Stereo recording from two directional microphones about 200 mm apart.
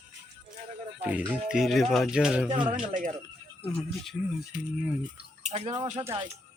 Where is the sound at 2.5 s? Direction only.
25° right (ahead or behind).